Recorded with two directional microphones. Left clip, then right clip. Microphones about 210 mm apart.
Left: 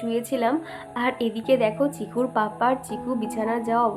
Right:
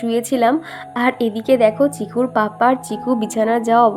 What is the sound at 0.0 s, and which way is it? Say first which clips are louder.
A woman's voice: right 8 dB; 40° right (ahead or behind).